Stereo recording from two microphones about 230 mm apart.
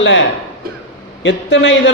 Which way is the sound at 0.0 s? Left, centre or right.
Left.